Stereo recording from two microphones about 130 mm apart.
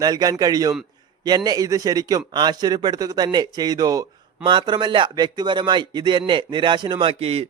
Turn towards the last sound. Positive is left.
turn(degrees=-50)  # may be behind; listen again after turning